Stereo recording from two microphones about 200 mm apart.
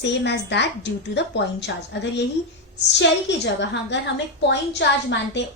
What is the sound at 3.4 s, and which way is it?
A woman's voice, 60° left (ahead or behind).